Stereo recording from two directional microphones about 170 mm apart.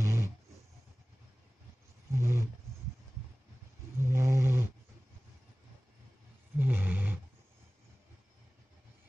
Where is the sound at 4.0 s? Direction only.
15° right (ahead or behind).